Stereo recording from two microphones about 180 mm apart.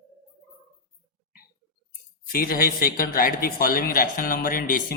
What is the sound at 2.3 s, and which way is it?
A man's voice, 55° left (ahead or behind).